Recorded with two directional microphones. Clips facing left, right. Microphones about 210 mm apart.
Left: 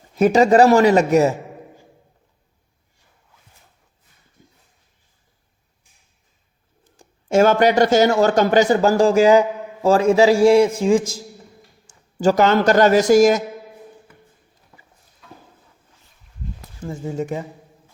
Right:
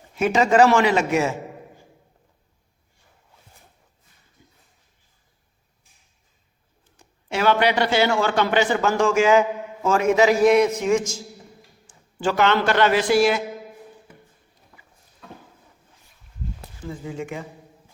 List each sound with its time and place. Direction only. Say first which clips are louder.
0.2 s a man's voice: left 4 dB; 35° left (ahead or behind)
7.0 s a man's voice: left 7 dB; 45° left (ahead or behind)
16.8 s speech: left 5 dB; 45° left (ahead or behind)